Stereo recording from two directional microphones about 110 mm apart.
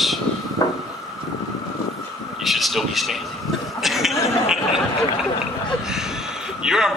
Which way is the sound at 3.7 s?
Centre (ahead or behind).